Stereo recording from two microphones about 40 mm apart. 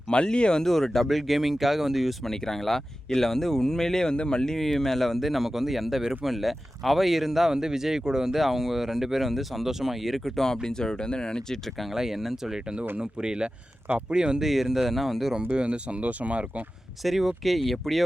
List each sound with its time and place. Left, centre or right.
0.1 s speech: left
0.6 s speech: centre
2.2 s speech: centre
4.5 s speech: centre
10.3 s speech: centre
11.8 s speech: centre
14.4 s speech: centre
15.5 s speech: right
17.0 s speech: centre